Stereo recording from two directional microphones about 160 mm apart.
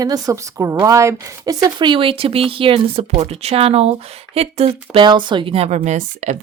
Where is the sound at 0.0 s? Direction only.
20° right (ahead or behind).